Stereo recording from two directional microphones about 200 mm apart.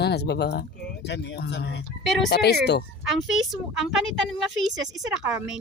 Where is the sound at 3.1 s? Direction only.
Centre (ahead or behind).